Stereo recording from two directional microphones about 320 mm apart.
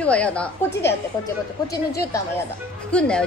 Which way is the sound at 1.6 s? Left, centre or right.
Centre.